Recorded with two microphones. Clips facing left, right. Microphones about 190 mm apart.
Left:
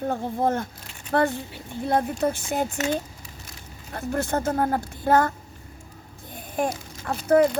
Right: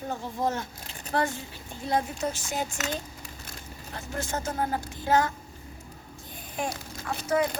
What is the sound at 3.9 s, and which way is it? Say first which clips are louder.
Speech: left 8 dB; 55° left (ahead or behind).